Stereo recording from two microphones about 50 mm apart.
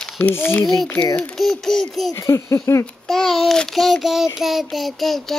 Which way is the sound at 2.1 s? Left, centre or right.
Left.